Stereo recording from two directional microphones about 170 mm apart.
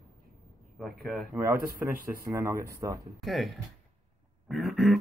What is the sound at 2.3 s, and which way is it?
Speech, 20° right (ahead or behind).